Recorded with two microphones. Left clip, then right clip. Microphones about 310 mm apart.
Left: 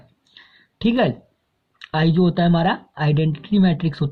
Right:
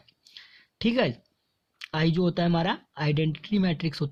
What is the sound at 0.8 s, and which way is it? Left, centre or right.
Speech, right.